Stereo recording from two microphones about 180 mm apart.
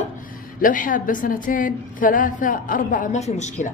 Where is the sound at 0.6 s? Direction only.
50° left (ahead or behind).